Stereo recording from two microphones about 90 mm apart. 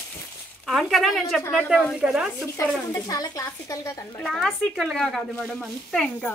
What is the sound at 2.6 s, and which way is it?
A woman's voice, 35° left (ahead or behind).